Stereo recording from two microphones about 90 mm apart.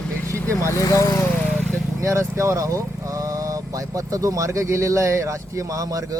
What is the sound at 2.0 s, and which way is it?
Speech, 35° right (ahead or behind).